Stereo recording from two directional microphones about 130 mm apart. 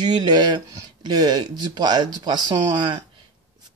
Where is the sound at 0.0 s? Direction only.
35° right (ahead or behind).